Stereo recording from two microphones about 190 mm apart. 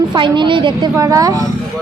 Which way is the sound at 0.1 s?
25° right (ahead or behind).